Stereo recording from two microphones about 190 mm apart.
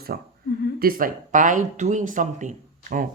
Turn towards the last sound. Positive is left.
turn(degrees=-40)  # may be behind; listen again after turning